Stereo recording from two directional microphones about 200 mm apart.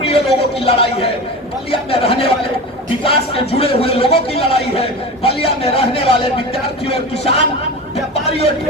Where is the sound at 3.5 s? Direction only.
30° left (ahead or behind).